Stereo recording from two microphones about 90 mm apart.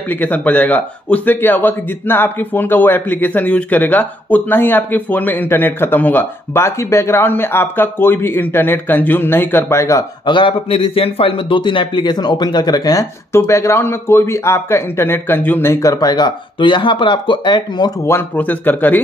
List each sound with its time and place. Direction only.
0.1 s a man's voice: 20° left (ahead or behind)
6.6 s a man's voice: 30° left (ahead or behind)
10.2 s a man's voice: 65° left (ahead or behind); by 13.0 s 45° left (ahead or behind)
13.3 s a man's voice: 30° left (ahead or behind)
15.8 s a man's voice: 40° left (ahead or behind)
18.0 s a man's voice: 25° left (ahead or behind)